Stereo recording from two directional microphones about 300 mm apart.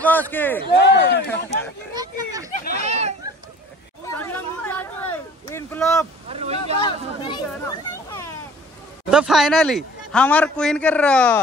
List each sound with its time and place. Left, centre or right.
0.0 s a man's voice: centre
0.7 s speech: left
1.2 s a man's voice: centre
2.0 s a sound: centre
4.1 s a sound: centre
6.2 s speech: right
7.2 s a child's voice: centre
9.1 s a man's voice: centre